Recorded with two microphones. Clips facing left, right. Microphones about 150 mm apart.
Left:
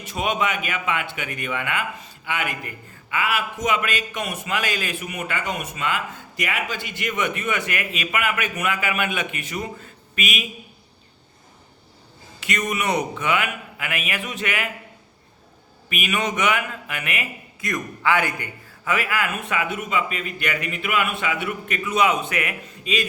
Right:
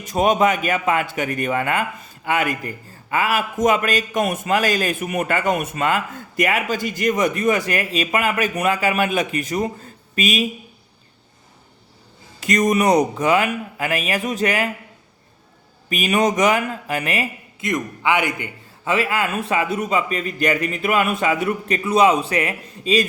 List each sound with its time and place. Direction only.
0.0 s a man's voice: 45° right (ahead or behind)
12.4 s a man's voice: 40° right (ahead or behind)
15.9 s a man's voice: 35° right (ahead or behind)
17.7 s a man's voice: 20° right (ahead or behind)